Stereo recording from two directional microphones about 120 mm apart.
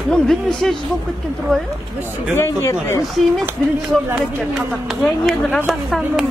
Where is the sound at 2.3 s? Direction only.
25° left (ahead or behind).